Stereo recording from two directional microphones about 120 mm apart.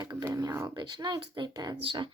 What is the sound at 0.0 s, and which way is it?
Speech, 35° right (ahead or behind).